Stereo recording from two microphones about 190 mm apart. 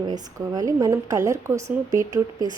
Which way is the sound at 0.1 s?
20° right (ahead or behind).